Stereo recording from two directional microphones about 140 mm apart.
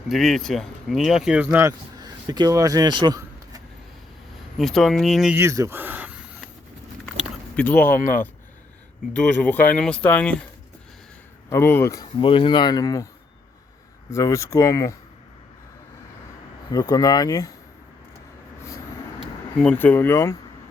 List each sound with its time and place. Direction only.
0.1 s speech: centre (ahead or behind)
1.6 s speech: 30° right (ahead or behind)
4.5 s speech: centre (ahead or behind)
5.3 s speech: 20° right (ahead or behind)
7.5 s speech: 10° left (ahead or behind)
7.9 s speech: 80° left
9.1 s speech: 10° left (ahead or behind)
11.4 s speech: 20° left (ahead or behind)
12.2 s speech: 40° left (ahead or behind)
14.1 s speech: 20° left (ahead or behind)
16.7 s speech: 30° left (ahead or behind)
19.5 s speech: 10° left (ahead or behind)